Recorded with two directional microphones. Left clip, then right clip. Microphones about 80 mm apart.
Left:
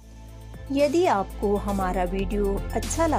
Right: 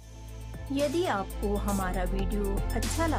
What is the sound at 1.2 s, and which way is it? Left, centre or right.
Speech, left.